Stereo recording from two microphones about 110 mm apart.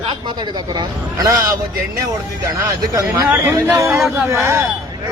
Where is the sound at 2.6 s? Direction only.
30° right (ahead or behind).